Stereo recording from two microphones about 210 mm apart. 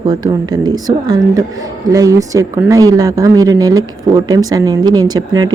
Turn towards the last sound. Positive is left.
turn(degrees=-20)  # may be behind; listen again after turning